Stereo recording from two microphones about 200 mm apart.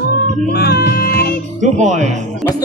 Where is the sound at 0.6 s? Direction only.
50° left (ahead or behind).